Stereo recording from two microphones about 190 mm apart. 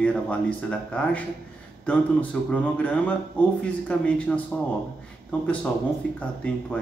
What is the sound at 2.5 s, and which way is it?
Speech, 5° left (ahead or behind).